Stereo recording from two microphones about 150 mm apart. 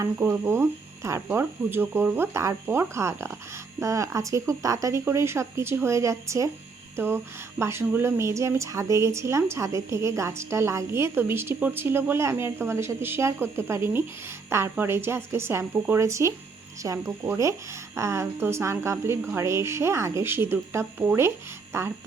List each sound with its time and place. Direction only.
0.0 s a woman's voice: 15° right (ahead or behind)
6.9 s a sound: 15° right (ahead or behind)
7.6 s a woman's voice: 15° right (ahead or behind)